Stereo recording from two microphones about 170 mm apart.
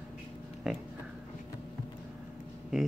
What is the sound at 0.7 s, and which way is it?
Speech, 5° right (ahead or behind).